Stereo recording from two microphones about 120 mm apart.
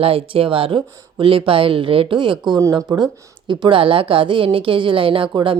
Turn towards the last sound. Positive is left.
turn(degrees=-40)  # may be behind; listen again after turning